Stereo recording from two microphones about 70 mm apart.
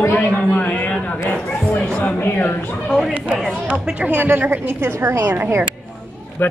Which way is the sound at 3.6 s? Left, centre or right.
Right.